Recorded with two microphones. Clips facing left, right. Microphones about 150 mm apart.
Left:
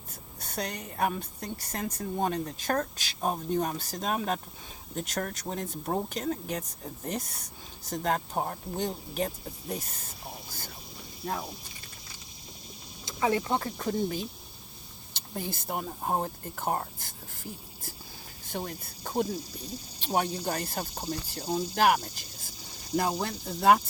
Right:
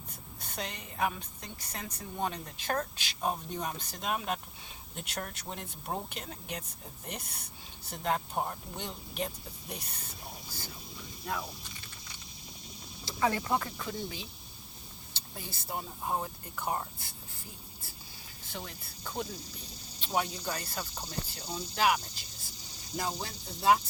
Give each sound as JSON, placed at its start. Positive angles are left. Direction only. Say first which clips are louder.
{"t": 0.3, "sound": "speech", "louder": "left 5 dB", "side_deg": 40}
{"t": 13.1, "sound": "speech", "louder": "left 3 dB", "side_deg": 20}
{"t": 13.6, "sound": "speech", "louder": "left 8 dB", "side_deg": 40}
{"t": 15.4, "sound": "speech", "louder": "left 6 dB", "side_deg": 50}
{"t": 18.5, "sound": "speech", "louder": "left 8 dB", "side_deg": 45}